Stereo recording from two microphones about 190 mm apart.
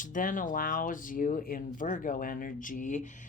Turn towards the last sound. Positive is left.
turn(degrees=40)  # may be behind; listen again after turning